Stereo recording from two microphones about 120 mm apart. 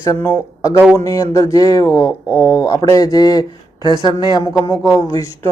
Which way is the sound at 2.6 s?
30° left (ahead or behind).